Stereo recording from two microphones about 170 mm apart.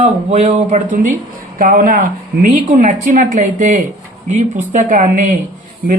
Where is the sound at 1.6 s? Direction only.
55° right (ahead or behind).